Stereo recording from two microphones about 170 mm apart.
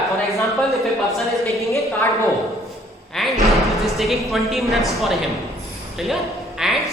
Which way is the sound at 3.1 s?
Centre (ahead or behind).